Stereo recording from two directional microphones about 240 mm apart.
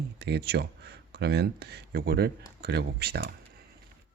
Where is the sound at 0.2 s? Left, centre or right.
Right.